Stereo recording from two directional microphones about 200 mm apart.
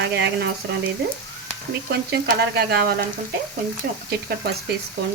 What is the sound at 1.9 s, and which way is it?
Frying, 55° right (ahead or behind).